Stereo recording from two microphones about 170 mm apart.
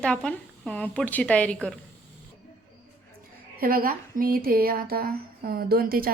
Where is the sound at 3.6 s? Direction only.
60° right (ahead or behind).